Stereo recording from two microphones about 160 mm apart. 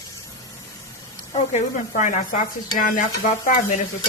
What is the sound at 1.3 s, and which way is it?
Speech, 45° left (ahead or behind).